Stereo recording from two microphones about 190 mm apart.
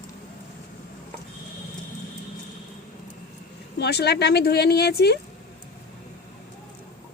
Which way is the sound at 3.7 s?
60° left (ahead or behind).